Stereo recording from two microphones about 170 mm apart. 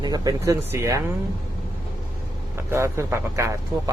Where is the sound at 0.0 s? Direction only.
20° right (ahead or behind).